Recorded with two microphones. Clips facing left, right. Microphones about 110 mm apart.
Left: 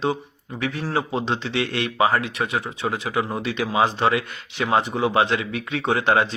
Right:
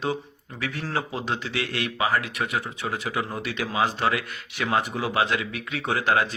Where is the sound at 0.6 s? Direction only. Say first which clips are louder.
Left 4 dB; 15° left (ahead or behind).